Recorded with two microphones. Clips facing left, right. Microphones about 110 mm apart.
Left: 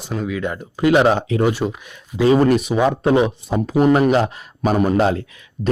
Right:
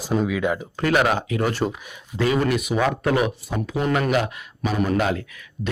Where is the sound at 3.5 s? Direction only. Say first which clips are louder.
Left 9 dB; 40° left (ahead or behind).